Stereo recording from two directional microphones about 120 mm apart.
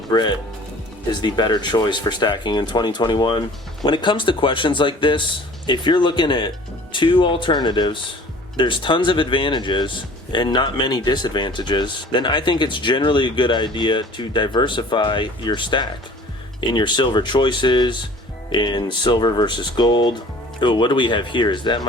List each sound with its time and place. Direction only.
0.1 s speech: 40° left (ahead or behind)